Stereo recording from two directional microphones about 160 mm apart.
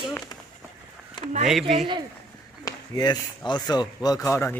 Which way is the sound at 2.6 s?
25° left (ahead or behind).